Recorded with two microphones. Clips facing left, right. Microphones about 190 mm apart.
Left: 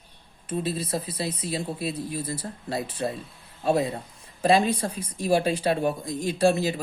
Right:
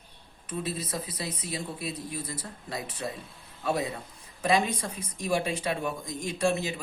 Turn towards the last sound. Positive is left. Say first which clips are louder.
# left 6 dB
turn(degrees=35)  # may be behind; listen again after turning